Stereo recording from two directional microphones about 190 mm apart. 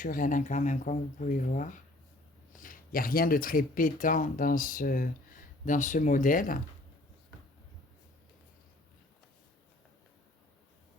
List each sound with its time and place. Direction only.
0.0 s speech: 45° left (ahead or behind)